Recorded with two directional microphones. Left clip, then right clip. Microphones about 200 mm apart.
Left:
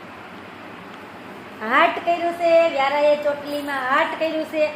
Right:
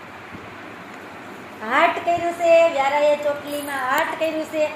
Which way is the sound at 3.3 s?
20° left (ahead or behind).